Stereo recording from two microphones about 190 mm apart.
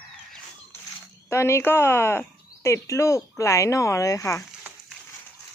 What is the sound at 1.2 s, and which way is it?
Speech, 15° left (ahead or behind).